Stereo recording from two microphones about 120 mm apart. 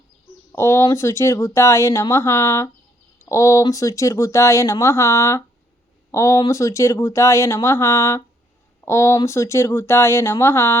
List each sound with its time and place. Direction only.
0.5 s speech: 20° left (ahead or behind)